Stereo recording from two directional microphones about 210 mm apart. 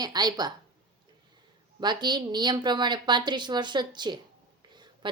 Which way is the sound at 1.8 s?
20° right (ahead or behind).